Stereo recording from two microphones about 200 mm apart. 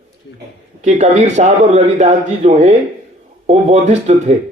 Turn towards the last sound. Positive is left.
turn(degrees=-35)  # may be behind; listen again after turning